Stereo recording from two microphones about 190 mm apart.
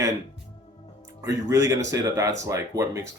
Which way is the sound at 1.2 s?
15° right (ahead or behind).